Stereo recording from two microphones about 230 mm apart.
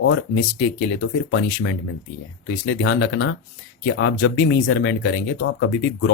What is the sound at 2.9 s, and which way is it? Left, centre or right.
Speech, left.